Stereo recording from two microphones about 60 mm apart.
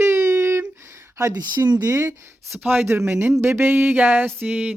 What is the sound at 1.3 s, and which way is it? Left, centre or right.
Speech, right.